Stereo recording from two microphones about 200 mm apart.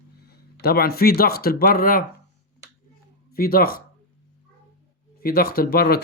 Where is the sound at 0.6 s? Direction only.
50° left (ahead or behind).